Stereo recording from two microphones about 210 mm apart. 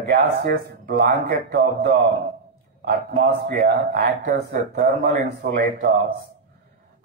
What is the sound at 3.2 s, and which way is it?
A man's voice, 45° right (ahead or behind).